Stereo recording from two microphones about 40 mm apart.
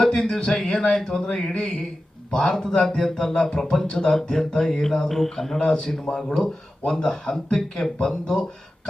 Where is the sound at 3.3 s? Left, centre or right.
Centre.